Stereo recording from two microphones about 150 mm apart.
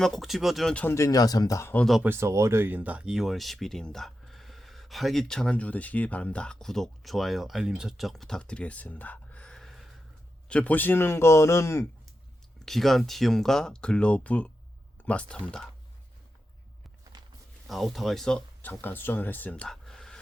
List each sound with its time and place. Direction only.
0.0 s speech: centre (ahead or behind)
0.9 s speech: 25° left (ahead or behind)
2.0 s a man's voice: 15° right (ahead or behind); by 11.9 s 20° left (ahead or behind)
12.5 s a man's voice: centre (ahead or behind)
17.7 s speech: centre (ahead or behind)